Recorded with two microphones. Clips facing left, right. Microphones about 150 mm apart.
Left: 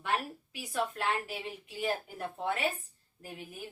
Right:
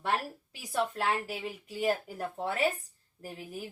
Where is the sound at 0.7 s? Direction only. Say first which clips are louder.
Right 2 dB; 40° right (ahead or behind).